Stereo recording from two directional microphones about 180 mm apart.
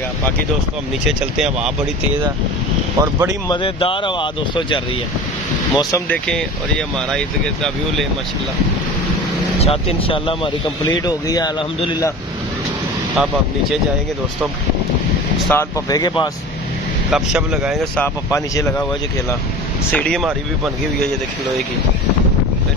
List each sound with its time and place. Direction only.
1.0 s speech: 5° right (ahead or behind)
3.0 s speech: 20° right (ahead or behind)
3.4 s speech: 30° left (ahead or behind)
7.1 s speech: 5° left (ahead or behind)
9.6 s speech: 35° left (ahead or behind)
13.1 s speech: 5° right (ahead or behind)
15.5 s speech: 20° left (ahead or behind)
17.1 s speech: 5° right (ahead or behind)
18.0 s speech: 15° left (ahead or behind)
19.9 s speech: 5° left (ahead or behind)